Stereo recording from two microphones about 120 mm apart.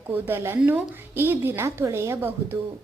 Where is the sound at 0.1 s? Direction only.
20° right (ahead or behind).